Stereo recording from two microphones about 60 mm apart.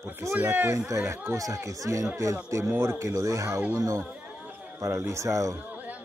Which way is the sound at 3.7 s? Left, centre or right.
Right.